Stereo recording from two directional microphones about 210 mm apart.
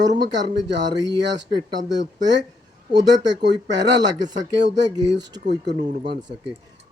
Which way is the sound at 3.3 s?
55° right (ahead or behind).